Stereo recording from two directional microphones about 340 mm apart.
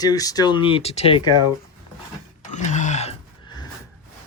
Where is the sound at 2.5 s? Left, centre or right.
Left.